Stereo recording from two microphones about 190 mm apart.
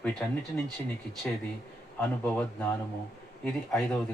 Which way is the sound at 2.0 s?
10° left (ahead or behind).